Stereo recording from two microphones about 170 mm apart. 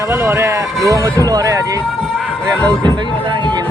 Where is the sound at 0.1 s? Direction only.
15° right (ahead or behind).